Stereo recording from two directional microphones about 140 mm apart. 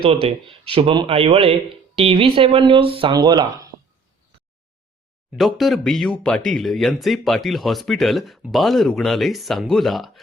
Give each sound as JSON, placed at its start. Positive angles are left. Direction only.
{"t": 0.0, "sound": "speech", "side_deg": -40}
{"t": 5.4, "sound": "speech", "side_deg": 0}